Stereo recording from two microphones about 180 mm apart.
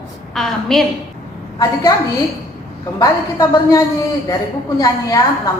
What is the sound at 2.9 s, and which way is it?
A woman's voice, 20° left (ahead or behind).